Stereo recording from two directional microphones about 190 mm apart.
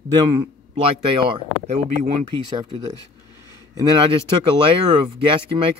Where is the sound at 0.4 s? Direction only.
25° right (ahead or behind).